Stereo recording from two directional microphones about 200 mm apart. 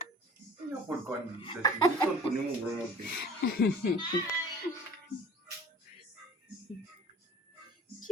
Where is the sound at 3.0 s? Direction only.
60° left (ahead or behind).